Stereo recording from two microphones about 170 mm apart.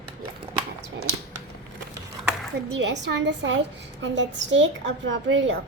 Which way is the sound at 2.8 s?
90° right.